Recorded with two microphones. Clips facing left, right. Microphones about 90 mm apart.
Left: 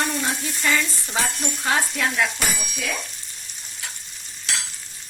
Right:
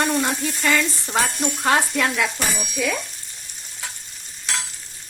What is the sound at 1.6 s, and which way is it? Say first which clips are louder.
Speech: right 3 dB; 65° right (ahead or behind).